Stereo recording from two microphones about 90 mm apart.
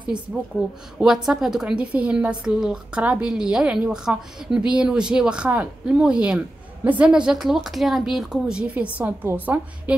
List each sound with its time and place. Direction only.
0.1 s a woman's voice: 10° right (ahead or behind)